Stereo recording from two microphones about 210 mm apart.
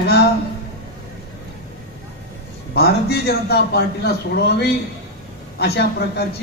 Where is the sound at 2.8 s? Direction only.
50° left (ahead or behind).